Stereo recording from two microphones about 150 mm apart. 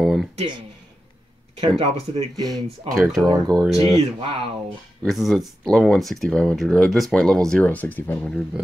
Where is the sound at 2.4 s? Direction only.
25° right (ahead or behind).